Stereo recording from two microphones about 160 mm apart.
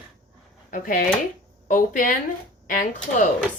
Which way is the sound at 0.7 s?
60° left (ahead or behind).